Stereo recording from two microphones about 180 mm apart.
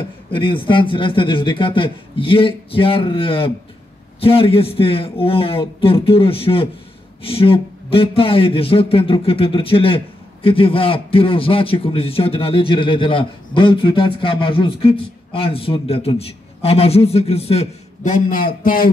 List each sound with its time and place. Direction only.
0.3 s a man's voice: 30° left (ahead or behind); by 18.9 s 50° left (ahead or behind)